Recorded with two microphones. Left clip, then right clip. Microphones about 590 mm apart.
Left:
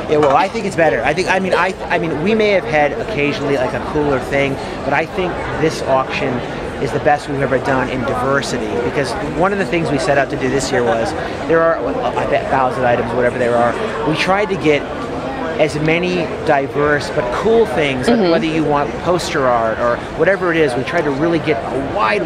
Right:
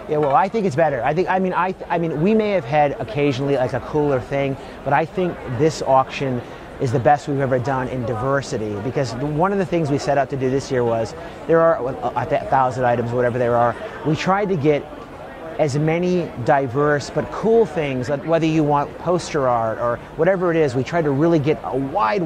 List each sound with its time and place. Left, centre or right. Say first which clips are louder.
0.1 s speech: left 4 dB; right
4.9 s a man's voice: left 1 dB; right
7.1 s a man's voice: left 1 dB; right
8.9 s speech: left 4 dB; right
11.5 s a man's voice: left 2 dB; right